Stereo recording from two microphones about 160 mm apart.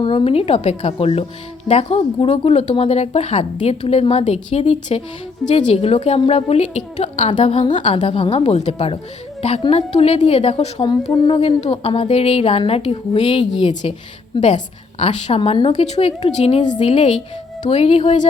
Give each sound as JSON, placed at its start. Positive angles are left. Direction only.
{"t": 0.0, "sound": "a woman's voice", "side_deg": 30}
{"t": 11.7, "sound": "a woman's voice", "side_deg": 30}
{"t": 15.7, "sound": "a woman's voice", "side_deg": 40}
{"t": 16.6, "sound": "a woman's voice", "side_deg": 30}